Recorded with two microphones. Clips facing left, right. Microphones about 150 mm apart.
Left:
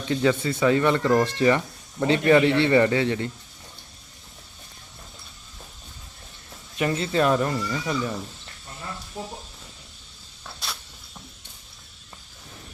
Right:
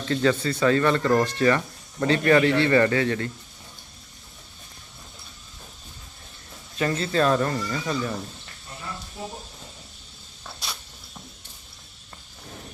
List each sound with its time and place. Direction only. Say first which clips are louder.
0.1 s a man's voice: even; 15° left (ahead or behind)
6.7 s speech: even; 15° left (ahead or behind)
10.4 s a sound: even; centre (ahead or behind)